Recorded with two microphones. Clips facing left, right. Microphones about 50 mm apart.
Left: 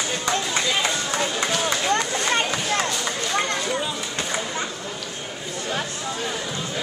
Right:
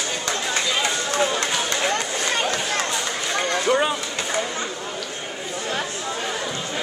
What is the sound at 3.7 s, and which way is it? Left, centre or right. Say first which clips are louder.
Speech: right 6 dB; right.